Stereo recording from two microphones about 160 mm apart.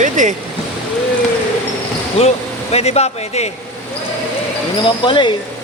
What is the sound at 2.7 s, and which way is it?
Speech, 40° left (ahead or behind).